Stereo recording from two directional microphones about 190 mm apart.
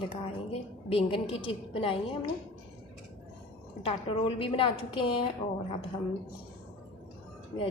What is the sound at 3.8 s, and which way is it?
Speech, 30° left (ahead or behind).